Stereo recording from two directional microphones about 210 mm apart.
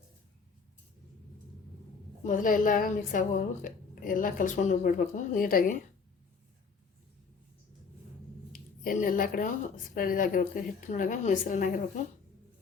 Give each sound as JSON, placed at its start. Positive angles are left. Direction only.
{"t": 2.2, "sound": "a woman's voice", "side_deg": 40}
{"t": 8.5, "sound": "a woman's voice", "side_deg": 45}